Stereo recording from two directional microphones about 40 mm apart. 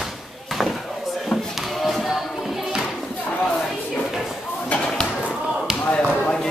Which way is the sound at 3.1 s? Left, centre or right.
Left.